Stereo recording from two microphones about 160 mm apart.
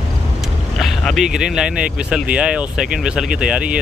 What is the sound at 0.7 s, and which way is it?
Speech, centre (ahead or behind).